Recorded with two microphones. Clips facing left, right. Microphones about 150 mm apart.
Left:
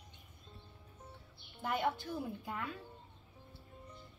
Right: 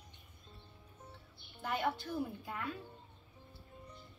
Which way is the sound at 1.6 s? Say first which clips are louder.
Left 1 dB; 20° left (ahead or behind).